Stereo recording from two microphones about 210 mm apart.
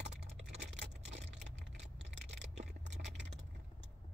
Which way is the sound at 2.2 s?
55° right (ahead or behind).